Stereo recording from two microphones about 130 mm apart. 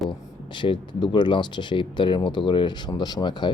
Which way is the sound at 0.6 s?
35° left (ahead or behind).